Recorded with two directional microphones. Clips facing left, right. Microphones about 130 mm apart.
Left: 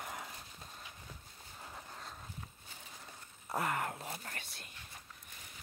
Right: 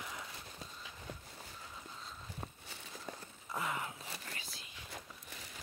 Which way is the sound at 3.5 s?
60° left (ahead or behind).